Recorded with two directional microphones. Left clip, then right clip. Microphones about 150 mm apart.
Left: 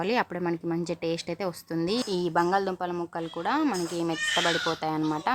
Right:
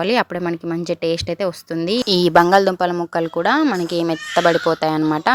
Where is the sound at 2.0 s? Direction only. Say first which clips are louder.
Right 16 dB; 50° right (ahead or behind).